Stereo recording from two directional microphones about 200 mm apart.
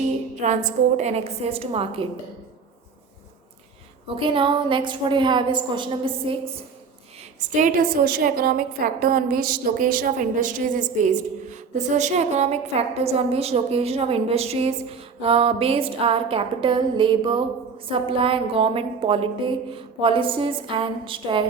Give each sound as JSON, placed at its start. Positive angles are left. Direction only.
{"t": 0.3, "sound": "a woman's voice", "side_deg": -35}
{"t": 4.1, "sound": "a woman's voice", "side_deg": -25}
{"t": 7.3, "sound": "a woman's voice", "side_deg": -40}